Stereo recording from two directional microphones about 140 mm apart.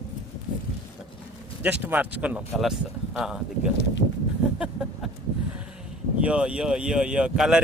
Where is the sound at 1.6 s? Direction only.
15° right (ahead or behind).